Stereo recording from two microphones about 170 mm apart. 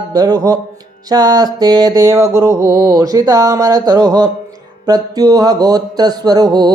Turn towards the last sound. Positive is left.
turn(degrees=-25)  # may be behind; listen again after turning